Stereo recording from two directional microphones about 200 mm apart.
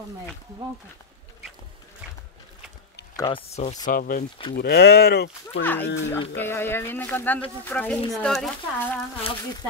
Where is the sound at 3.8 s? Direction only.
45° left (ahead or behind).